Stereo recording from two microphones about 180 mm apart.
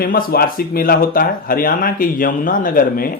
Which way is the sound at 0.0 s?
55° left (ahead or behind).